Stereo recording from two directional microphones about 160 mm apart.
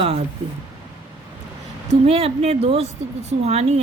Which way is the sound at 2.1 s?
40° right (ahead or behind).